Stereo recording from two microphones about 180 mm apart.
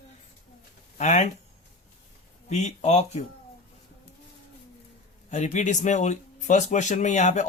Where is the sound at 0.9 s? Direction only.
40° left (ahead or behind).